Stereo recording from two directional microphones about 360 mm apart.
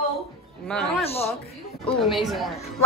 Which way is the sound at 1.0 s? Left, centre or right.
Centre.